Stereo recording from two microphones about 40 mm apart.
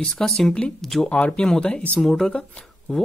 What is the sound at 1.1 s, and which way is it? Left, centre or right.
Speech, left.